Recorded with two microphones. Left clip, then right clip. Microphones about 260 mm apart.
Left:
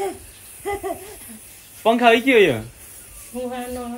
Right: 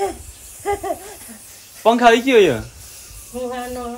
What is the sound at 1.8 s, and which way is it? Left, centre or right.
Speech, centre.